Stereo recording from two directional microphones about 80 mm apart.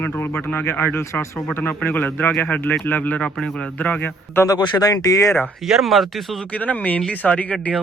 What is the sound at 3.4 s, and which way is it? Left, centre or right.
Speech, centre.